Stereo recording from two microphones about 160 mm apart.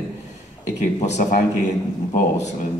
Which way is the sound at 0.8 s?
45° left (ahead or behind).